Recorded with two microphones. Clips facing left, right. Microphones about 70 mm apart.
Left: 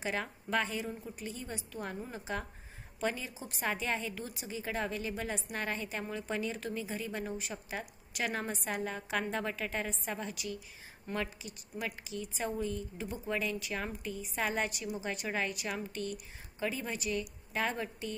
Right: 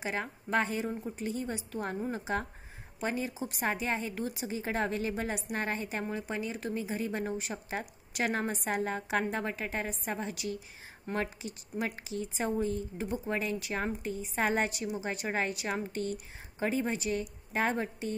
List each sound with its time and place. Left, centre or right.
0.0 s a woman's voice: right
3.2 s a woman's voice: right
6.2 s speech: centre
6.7 s a woman's voice: right
9.1 s a woman's voice: right
13.1 s a woman's voice: right
14.8 s a woman's voice: right